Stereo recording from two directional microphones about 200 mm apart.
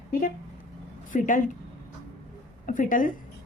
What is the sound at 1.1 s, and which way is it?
Speech, 40° left (ahead or behind).